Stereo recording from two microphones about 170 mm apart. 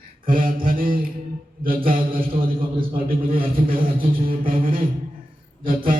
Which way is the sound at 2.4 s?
55° right (ahead or behind).